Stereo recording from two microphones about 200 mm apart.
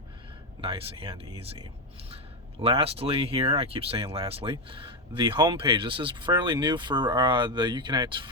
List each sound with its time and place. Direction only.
0.6 s speech: 30° right (ahead or behind)
2.6 s speech: 25° right (ahead or behind)